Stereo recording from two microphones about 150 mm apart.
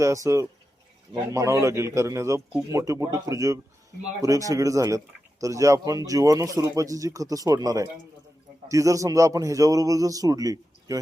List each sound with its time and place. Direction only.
0.0 s speech: 20° right (ahead or behind)